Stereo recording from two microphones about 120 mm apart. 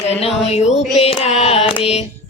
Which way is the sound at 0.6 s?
65° left (ahead or behind).